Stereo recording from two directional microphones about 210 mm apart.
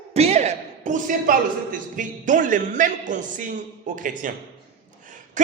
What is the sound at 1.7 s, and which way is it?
A man's voice, 40° right (ahead or behind).